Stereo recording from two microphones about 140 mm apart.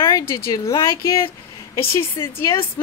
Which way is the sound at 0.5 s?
25° left (ahead or behind).